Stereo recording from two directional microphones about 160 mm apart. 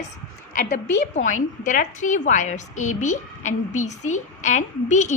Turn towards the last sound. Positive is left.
turn(degrees=50)  # may be behind; listen again after turning